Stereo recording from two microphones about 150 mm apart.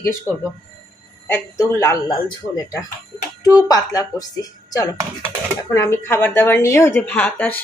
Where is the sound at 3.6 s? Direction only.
25° left (ahead or behind).